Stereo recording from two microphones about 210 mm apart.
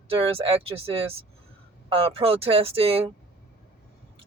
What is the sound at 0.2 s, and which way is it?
Speech, 25° right (ahead or behind).